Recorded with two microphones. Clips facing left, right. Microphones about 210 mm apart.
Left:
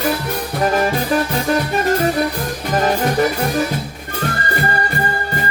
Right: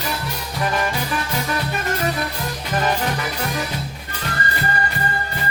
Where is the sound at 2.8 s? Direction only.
45° left (ahead or behind).